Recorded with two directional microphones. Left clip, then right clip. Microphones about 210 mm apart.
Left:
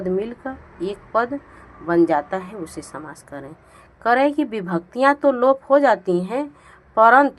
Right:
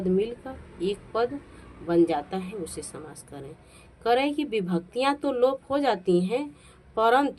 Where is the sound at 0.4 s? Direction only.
20° left (ahead or behind).